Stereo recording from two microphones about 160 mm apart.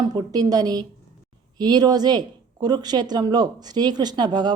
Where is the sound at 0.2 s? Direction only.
25° right (ahead or behind).